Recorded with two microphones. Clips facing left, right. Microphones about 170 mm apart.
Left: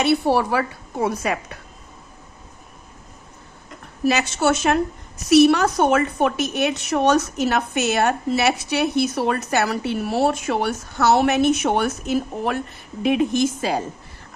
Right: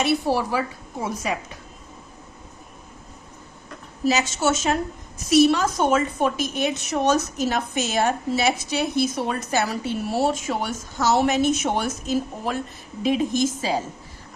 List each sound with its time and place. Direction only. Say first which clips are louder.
0.0 s a woman's voice: left 3 dB; 65° left (ahead or behind)
4.0 s a woman's voice: left 2 dB; 60° left (ahead or behind)